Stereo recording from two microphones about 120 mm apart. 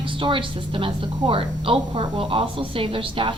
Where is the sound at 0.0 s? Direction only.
45° right (ahead or behind).